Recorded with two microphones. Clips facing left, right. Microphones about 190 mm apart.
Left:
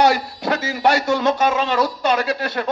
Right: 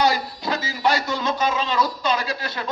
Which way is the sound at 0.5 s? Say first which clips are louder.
Left 4 dB; 70° left (ahead or behind).